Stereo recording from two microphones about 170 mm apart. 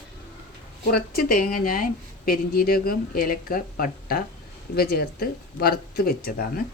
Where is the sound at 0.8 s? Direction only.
65° left (ahead or behind).